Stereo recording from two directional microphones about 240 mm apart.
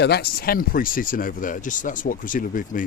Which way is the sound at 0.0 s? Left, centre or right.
Left.